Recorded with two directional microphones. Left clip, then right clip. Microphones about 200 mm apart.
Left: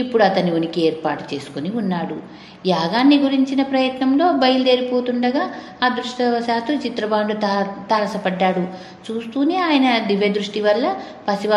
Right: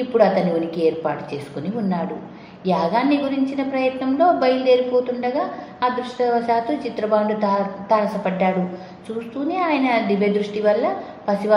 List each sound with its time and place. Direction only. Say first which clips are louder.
0.1 s a woman's voice: even; 35° left (ahead or behind)
2.6 s a woman's voice: left 2 dB; 35° left (ahead or behind)